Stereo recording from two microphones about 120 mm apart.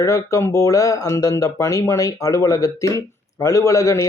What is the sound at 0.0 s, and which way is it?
Speech, 25° left (ahead or behind).